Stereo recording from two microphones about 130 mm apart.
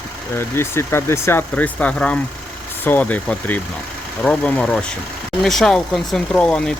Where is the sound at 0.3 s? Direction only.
20° left (ahead or behind).